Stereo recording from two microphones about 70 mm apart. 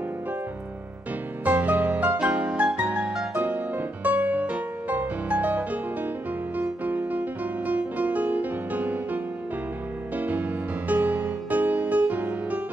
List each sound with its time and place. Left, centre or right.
1.4 s music: right